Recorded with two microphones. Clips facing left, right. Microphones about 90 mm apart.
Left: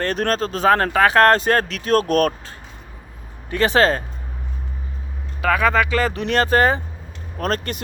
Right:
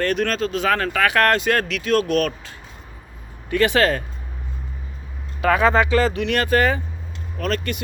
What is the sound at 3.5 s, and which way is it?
Speech, 30° left (ahead or behind).